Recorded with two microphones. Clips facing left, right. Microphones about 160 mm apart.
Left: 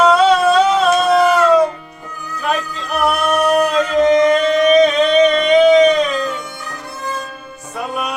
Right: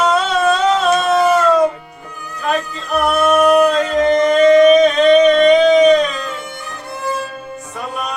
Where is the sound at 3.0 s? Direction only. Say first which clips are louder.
Right 3 dB; centre (ahead or behind).